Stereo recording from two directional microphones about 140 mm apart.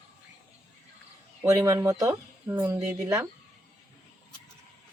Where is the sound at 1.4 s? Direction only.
10° right (ahead or behind).